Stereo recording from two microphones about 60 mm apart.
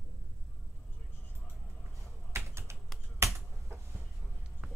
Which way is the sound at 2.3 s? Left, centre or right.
Right.